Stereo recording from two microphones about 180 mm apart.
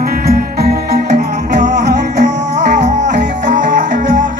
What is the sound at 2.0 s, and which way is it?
Music, 40° right (ahead or behind).